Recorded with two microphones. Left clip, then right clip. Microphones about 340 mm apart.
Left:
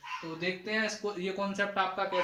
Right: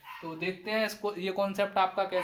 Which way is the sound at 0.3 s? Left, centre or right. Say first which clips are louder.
Right 2 dB; centre.